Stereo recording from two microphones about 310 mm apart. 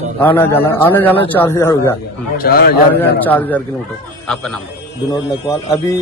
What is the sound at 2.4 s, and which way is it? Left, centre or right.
Speech, left.